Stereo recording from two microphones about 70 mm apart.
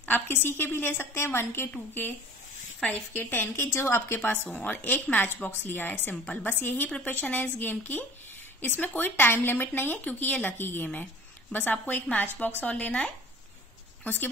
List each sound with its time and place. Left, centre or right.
0.0 s a woman's voice: left
3.2 s a woman's voice: left; by 13.1 s centre
14.0 s speech: left